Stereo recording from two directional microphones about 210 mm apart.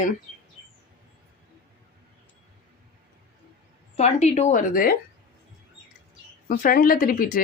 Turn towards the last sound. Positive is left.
turn(degrees=40)  # may be behind; listen again after turning